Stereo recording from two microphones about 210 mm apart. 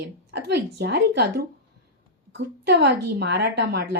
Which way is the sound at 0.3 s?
55° right (ahead or behind).